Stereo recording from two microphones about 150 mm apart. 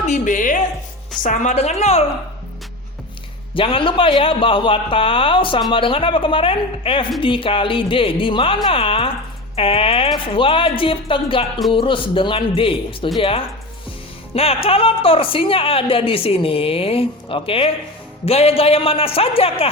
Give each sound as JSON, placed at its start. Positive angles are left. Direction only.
{"t": 0.0, "sound": "a woman's voice", "side_deg": 55}
{"t": 3.5, "sound": "a woman's voice", "side_deg": 35}